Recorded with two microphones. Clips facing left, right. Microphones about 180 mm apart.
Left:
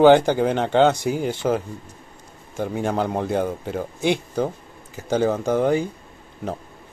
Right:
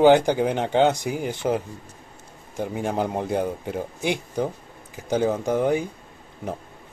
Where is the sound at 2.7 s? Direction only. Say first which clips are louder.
Left 2 dB; 10° right (ahead or behind).